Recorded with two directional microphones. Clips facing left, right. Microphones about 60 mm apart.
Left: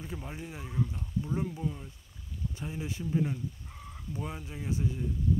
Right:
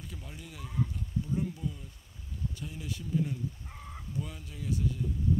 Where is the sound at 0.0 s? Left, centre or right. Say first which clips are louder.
Left 6 dB; left.